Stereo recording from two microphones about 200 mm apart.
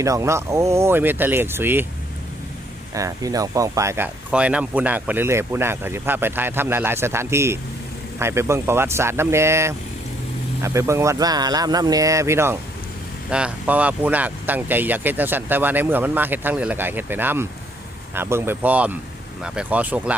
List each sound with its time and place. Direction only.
0.0 s speech: 15° right (ahead or behind)
2.9 s speech: 15° right (ahead or behind)